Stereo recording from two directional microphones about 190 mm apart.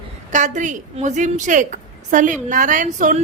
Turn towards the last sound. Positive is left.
turn(degrees=-40)  # may be behind; listen again after turning